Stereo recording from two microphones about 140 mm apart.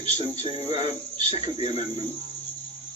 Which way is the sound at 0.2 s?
40° left (ahead or behind).